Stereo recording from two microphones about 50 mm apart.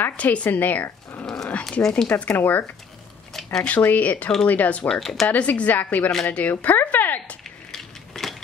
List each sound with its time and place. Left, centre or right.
0.2 s speech: left
1.2 s dog: centre
1.6 s speech: centre
2.2 s speech: left
3.8 s speech: left
4.8 s speech: centre
5.3 s speech: left
7.7 s a sound: centre